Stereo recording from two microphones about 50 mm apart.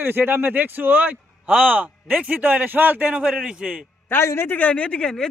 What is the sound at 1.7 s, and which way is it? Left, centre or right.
Speech, right.